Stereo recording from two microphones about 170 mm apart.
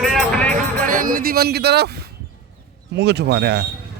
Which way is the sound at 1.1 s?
60° right (ahead or behind).